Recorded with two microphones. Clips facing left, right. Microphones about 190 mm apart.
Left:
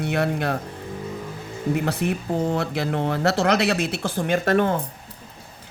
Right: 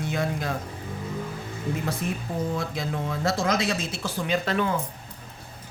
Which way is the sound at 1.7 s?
65° left (ahead or behind).